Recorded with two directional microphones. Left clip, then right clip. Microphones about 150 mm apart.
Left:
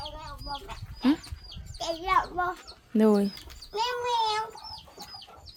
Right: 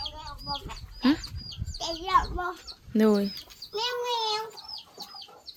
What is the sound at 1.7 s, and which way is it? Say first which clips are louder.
Speech: right 1 dB; 25° left (ahead or behind).